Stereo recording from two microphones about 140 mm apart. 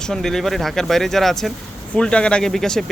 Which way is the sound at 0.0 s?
5° left (ahead or behind).